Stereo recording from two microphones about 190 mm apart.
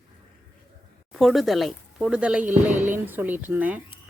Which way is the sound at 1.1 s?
Centre (ahead or behind).